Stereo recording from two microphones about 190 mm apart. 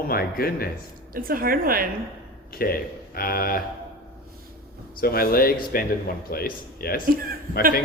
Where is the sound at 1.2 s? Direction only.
50° right (ahead or behind).